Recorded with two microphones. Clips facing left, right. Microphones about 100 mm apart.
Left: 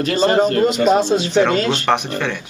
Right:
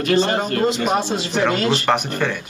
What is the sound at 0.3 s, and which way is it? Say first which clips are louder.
Speech: left 6 dB; 30° left (ahead or behind).